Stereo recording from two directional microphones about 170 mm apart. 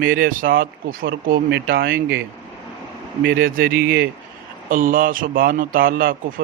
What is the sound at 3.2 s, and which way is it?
Speech, 60° right (ahead or behind).